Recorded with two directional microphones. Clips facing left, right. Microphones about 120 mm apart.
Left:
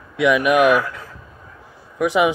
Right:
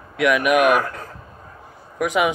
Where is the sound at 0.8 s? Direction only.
40° right (ahead or behind).